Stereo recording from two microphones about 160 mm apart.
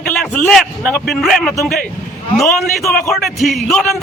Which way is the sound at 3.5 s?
Centre (ahead or behind).